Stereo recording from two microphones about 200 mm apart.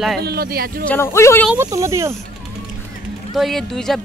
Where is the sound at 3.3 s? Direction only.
Centre (ahead or behind).